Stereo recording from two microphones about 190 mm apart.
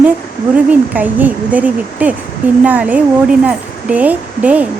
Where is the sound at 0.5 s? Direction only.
10° right (ahead or behind).